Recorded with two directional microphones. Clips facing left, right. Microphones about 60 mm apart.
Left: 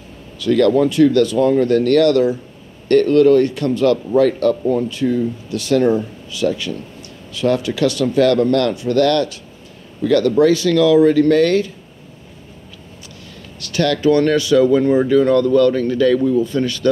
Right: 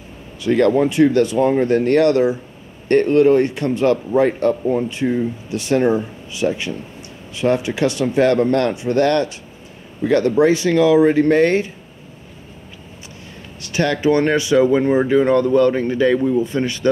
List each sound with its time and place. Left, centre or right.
0.4 s speech: right
13.6 s speech: right